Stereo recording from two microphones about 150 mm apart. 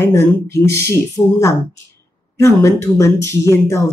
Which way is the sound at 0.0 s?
20° left (ahead or behind).